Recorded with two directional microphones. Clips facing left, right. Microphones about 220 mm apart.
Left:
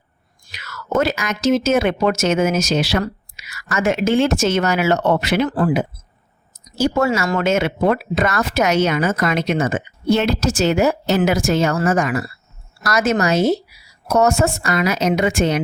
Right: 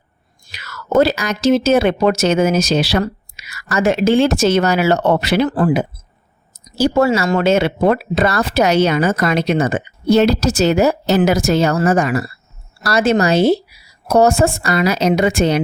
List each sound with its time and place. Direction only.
0.5 s speech: 35° right (ahead or behind)